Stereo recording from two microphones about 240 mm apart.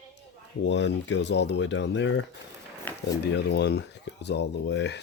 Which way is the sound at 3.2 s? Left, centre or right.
Left.